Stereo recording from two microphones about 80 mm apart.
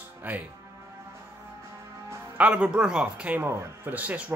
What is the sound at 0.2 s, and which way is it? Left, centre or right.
Speech, right.